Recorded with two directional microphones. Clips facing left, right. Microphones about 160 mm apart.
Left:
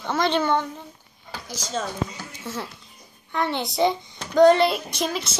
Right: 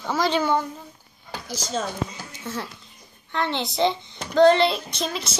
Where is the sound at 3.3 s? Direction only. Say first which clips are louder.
Left 1 dB; 10° left (ahead or behind).